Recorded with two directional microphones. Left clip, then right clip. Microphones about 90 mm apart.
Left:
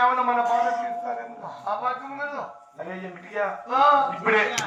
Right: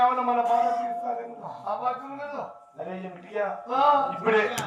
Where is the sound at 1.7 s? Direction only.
45° right (ahead or behind).